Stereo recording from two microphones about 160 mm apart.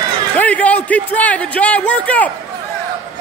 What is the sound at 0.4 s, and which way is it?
A man's voice, 10° left (ahead or behind).